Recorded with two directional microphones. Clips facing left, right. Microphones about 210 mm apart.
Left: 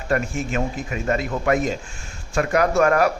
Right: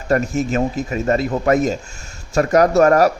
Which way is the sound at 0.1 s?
40° right (ahead or behind).